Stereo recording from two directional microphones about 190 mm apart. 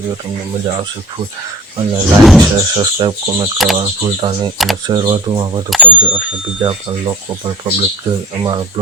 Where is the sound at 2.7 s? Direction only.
25° right (ahead or behind).